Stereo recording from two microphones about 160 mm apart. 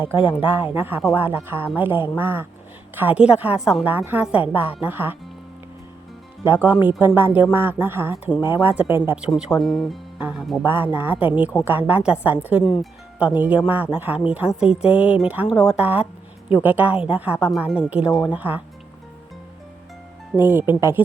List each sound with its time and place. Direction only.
0.2 s speech: 30° left (ahead or behind)
0.5 s speech: 15° right (ahead or behind)
6.4 s speech: 10° right (ahead or behind)
9.3 s speech: centre (ahead or behind)
10.6 s speech: 15° right (ahead or behind)
20.3 s speech: 15° right (ahead or behind)